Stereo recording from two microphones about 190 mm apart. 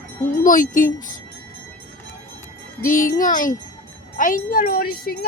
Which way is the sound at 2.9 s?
45° left (ahead or behind).